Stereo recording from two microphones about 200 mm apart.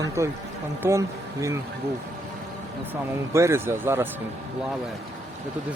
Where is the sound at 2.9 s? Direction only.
15° right (ahead or behind).